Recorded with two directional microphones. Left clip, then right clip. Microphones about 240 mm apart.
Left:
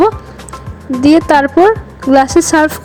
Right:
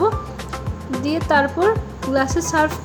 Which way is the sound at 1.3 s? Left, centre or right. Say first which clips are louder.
Left 9 dB; left.